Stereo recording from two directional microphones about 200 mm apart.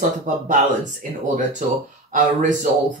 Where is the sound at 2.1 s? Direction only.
40° right (ahead or behind).